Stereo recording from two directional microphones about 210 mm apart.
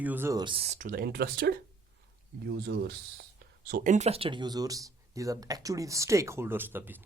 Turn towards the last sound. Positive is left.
turn(degrees=-10)  # may be behind; listen again after turning